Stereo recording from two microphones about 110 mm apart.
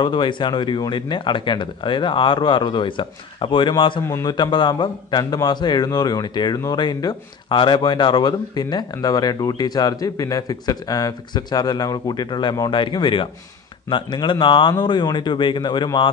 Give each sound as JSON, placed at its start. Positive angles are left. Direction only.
{"t": 0.0, "sound": "a man's voice", "side_deg": 45}